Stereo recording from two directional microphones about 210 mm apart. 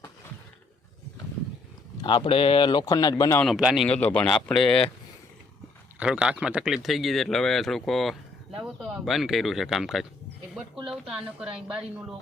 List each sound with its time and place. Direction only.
2.0 s speech: 25° left (ahead or behind)
3.4 s a man's voice: centre (ahead or behind)
6.0 s a man's voice: 5° right (ahead or behind)